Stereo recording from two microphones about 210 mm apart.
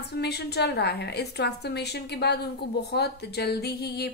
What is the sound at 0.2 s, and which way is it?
A woman's voice, 50° left (ahead or behind).